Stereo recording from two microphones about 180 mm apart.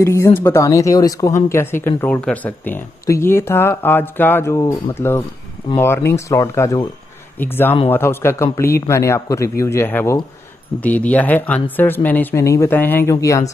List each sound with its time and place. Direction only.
0.0 s speech: 15° left (ahead or behind)
5.8 s speech: 15° left (ahead or behind)